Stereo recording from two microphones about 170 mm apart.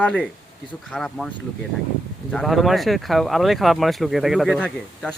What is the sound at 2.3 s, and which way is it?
Speech, centre (ahead or behind).